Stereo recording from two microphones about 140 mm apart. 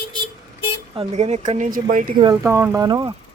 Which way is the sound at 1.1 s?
50° right (ahead or behind).